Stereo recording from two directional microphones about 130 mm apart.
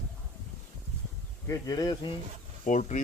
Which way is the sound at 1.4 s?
25° left (ahead or behind).